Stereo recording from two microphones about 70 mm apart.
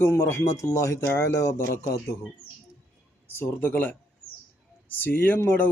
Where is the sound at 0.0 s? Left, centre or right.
Left.